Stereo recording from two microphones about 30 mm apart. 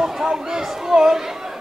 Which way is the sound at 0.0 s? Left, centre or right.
Centre.